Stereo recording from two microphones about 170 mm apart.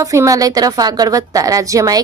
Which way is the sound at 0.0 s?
20° right (ahead or behind).